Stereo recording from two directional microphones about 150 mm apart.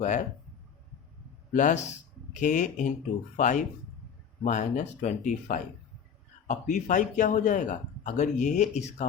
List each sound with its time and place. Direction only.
0.0 s speech: 55° left (ahead or behind)
1.5 s speech: 60° left (ahead or behind)